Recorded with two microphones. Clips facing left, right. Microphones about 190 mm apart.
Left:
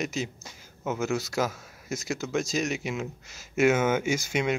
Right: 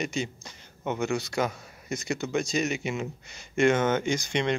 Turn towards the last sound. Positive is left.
turn(degrees=5)  # may be behind; listen again after turning